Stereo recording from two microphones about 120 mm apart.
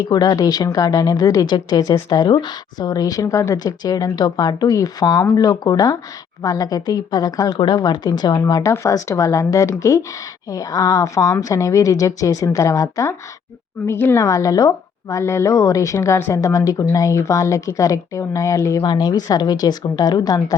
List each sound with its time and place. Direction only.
0.0 s a woman's voice: 35° left (ahead or behind)